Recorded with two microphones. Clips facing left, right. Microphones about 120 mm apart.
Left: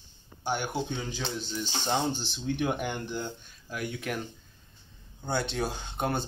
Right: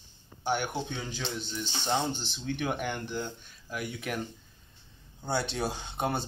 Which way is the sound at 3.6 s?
5° right (ahead or behind).